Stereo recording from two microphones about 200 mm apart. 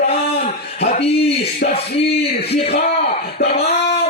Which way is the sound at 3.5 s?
30° left (ahead or behind).